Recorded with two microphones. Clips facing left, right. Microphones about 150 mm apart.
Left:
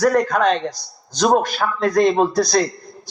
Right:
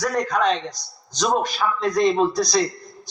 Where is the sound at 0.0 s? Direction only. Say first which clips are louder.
Left 5 dB; 55° left (ahead or behind).